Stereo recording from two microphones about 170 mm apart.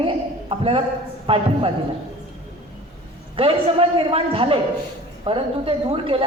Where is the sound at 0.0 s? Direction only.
30° right (ahead or behind).